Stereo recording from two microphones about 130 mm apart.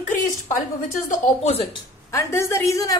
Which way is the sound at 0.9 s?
85° left.